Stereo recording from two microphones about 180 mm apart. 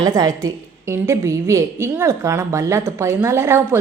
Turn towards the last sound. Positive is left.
turn(degrees=-15)  # may be behind; listen again after turning